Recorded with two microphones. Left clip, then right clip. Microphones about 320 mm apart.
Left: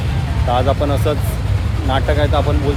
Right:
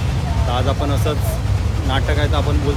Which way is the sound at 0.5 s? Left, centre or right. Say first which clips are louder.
Left 6 dB; centre.